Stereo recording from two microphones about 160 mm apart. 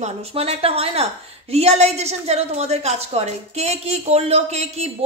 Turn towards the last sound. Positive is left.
turn(degrees=-40)  # may be behind; listen again after turning